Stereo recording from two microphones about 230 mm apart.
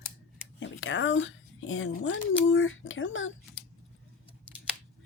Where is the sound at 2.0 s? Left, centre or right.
Left.